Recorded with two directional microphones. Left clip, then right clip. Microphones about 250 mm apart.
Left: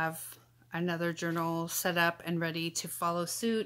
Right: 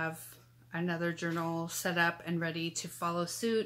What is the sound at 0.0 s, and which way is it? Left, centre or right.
Speech, left.